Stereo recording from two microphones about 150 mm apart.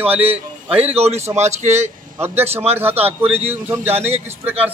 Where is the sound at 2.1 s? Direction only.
15° right (ahead or behind).